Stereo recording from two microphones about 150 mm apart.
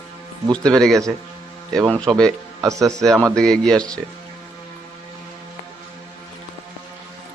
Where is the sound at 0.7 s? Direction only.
5° left (ahead or behind).